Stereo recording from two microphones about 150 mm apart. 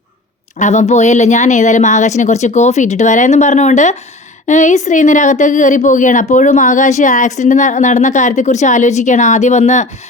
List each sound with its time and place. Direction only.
0.6 s a woman's voice: 50° left (ahead or behind)